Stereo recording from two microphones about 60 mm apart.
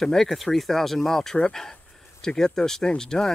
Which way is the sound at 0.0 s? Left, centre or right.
Centre.